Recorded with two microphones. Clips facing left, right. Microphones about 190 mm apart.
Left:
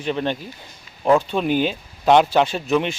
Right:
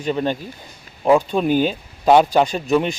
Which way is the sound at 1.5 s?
45° right (ahead or behind).